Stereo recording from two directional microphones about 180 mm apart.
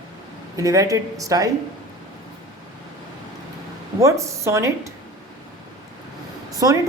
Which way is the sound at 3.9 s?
15° right (ahead or behind).